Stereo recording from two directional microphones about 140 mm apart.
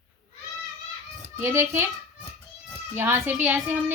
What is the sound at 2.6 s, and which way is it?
Children playing, 15° right (ahead or behind).